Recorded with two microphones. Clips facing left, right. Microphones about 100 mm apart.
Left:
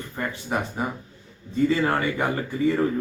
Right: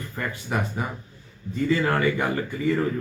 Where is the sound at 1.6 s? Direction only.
25° left (ahead or behind).